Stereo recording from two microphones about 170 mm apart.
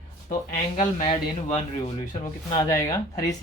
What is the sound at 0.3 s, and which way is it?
Speech, 50° left (ahead or behind).